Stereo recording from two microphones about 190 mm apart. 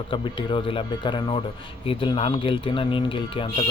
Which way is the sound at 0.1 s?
25° left (ahead or behind).